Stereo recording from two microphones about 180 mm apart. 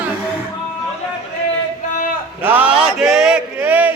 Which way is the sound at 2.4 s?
10° right (ahead or behind).